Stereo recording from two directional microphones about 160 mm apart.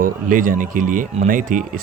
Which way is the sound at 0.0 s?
60° right (ahead or behind).